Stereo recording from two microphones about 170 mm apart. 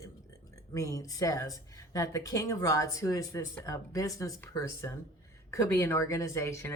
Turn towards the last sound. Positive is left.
turn(degrees=15)  # may be behind; listen again after turning